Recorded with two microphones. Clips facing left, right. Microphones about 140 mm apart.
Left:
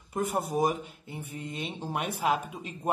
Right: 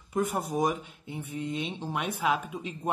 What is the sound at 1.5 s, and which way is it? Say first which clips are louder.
Speech: right 3 dB; 50° left (ahead or behind).